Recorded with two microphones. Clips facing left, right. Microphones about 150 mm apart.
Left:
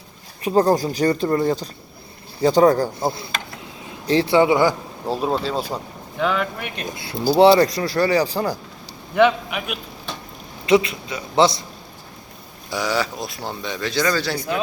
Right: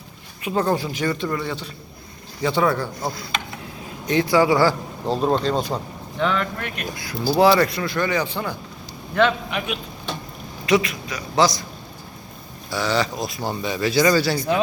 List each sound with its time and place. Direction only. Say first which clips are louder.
0.4 s speech: left 5 dB; 35° left (ahead or behind); by 5.1 s 20° left (ahead or behind)
5.1 s speech: right 2 dB; 5° left (ahead or behind)
6.7 s speech: even; 25° left (ahead or behind)
9.1 s a man's voice: left 3 dB; 10° left (ahead or behind)
10.7 s a man's voice: left 3 dB; 25° left (ahead or behind)
12.7 s speech: right 1 dB; 10° left (ahead or behind); by 14.3 s 10° right (ahead or behind)